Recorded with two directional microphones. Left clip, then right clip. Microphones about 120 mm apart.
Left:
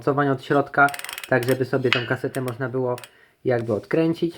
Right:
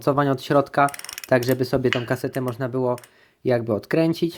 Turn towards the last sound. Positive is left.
turn(degrees=-45)  # may be behind; listen again after turning